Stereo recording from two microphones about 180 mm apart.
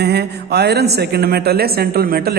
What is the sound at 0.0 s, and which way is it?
A woman's voice, 65° right (ahead or behind).